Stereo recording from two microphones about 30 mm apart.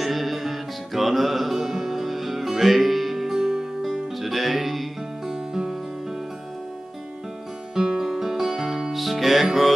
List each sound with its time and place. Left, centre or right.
0.0 s music: centre
3.3 s music: centre
3.9 s music: centre
5.2 s music: centre
7.7 s music: centre